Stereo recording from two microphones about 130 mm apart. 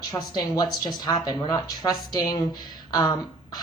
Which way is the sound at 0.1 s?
30° left (ahead or behind).